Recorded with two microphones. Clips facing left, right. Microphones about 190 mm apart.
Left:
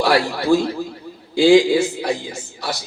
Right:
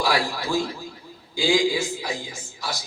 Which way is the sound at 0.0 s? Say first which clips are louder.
Left 7 dB; 65° left (ahead or behind).